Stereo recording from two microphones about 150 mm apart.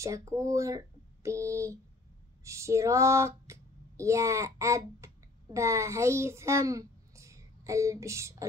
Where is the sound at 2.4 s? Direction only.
20° right (ahead or behind).